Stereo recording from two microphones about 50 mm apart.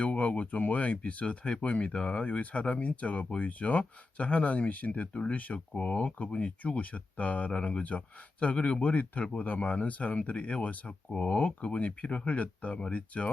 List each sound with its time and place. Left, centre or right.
0.0 s speech: left